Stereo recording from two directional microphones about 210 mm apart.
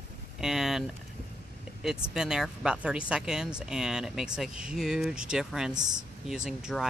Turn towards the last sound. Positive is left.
turn(degrees=0)  # may be behind; listen again after turning